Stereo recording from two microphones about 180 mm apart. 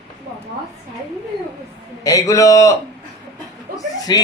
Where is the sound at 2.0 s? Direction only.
20° left (ahead or behind).